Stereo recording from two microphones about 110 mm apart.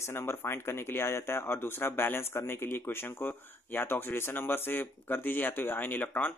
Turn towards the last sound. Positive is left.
turn(degrees=15)  # may be behind; listen again after turning